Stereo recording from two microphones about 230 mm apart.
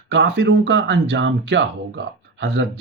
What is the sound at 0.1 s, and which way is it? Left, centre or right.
Speech, right.